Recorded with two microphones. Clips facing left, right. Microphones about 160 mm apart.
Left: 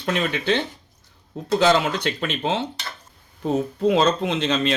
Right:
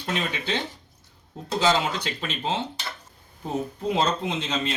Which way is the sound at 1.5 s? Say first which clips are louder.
Left 4 dB; 65° left (ahead or behind).